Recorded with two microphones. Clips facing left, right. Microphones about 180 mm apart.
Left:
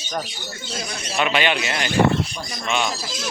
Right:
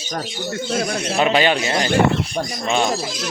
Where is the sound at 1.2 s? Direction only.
35° right (ahead or behind).